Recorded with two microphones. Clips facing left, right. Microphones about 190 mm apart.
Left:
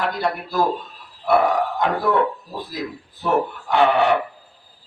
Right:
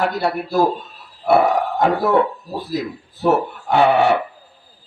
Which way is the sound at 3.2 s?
45° right (ahead or behind).